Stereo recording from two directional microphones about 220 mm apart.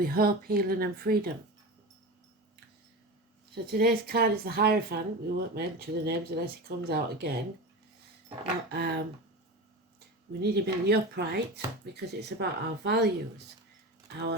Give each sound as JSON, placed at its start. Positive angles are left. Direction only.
{"t": 0.0, "sound": "speech", "side_deg": -40}
{"t": 3.5, "sound": "speech", "side_deg": -45}
{"t": 8.7, "sound": "speech", "side_deg": -45}
{"t": 10.4, "sound": "speech", "side_deg": -45}